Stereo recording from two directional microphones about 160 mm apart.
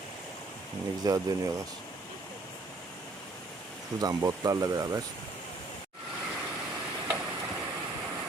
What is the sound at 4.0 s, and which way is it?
Speech, 25° right (ahead or behind).